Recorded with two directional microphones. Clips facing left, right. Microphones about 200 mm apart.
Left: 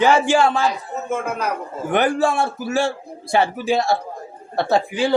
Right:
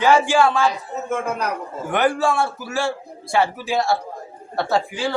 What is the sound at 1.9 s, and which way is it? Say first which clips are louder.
A man's voice: left 1 dB; 20° left (ahead or behind).